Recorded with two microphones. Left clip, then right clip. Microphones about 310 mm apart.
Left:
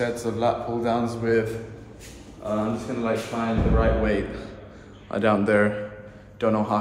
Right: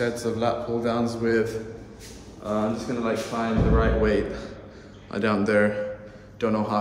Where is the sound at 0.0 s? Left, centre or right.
Centre.